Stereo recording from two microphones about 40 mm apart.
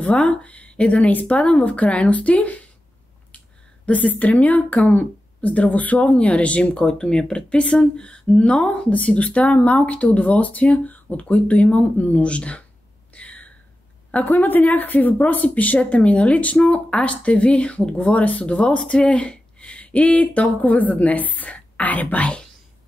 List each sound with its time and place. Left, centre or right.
0.0 s speech: left
3.8 s speech: left
6.8 s speech: centre
13.1 s a sound: left
14.1 s speech: left